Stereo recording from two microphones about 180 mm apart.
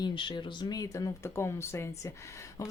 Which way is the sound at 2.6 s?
20° left (ahead or behind).